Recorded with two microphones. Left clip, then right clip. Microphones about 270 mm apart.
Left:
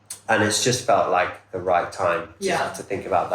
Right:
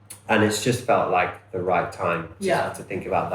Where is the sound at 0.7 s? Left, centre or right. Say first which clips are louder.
Left 2 dB; centre.